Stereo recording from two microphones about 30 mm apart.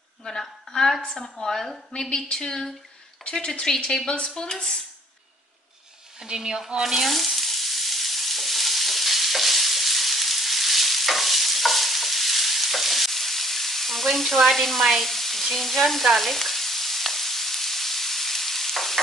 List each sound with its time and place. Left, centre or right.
0.2 s a sound: centre
1.0 s a woman's voice: left
2.0 s a woman's voice: left
2.3 s a woman's voice: left
3.8 s a woman's voice: left
6.1 s speech: right
6.8 s sizzle: centre
7.1 s frying: centre